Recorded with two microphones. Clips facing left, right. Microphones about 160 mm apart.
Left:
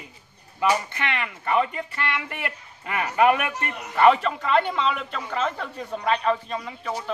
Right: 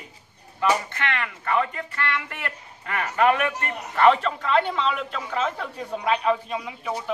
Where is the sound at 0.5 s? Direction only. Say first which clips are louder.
Even; 15° left (ahead or behind); by 6.9 s 10° right (ahead or behind).